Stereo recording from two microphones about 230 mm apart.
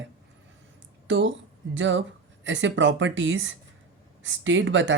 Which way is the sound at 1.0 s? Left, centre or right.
Right.